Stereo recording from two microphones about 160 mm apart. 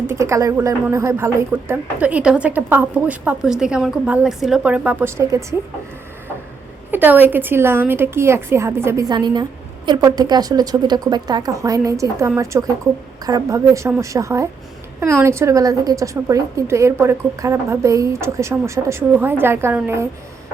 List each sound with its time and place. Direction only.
0.1 s speech: 20° right (ahead or behind)
6.9 s a woman's voice: 10° right (ahead or behind)